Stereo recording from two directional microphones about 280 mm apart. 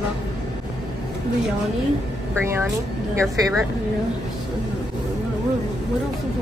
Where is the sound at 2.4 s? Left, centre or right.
Centre.